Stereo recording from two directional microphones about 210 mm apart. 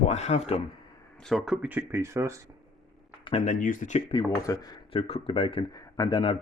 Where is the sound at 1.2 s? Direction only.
Centre (ahead or behind).